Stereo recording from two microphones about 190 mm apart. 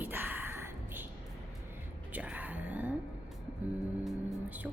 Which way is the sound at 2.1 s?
5° right (ahead or behind).